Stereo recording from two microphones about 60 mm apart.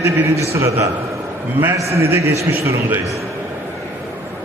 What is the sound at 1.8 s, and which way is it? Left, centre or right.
A man's voice, right.